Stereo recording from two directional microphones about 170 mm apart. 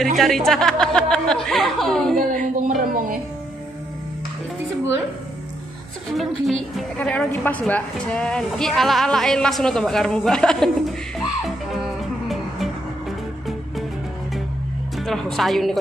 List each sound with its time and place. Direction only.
0.2 s a woman's voice: centre (ahead or behind)
2.1 s speech: 50° right (ahead or behind)
2.8 s music: 55° right (ahead or behind)
6.1 s a woman's voice: centre (ahead or behind)
11.1 s music: centre (ahead or behind)
15.0 s a woman's voice: centre (ahead or behind)